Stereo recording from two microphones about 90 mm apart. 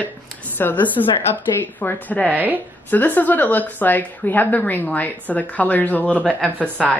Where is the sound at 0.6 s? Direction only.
20° left (ahead or behind).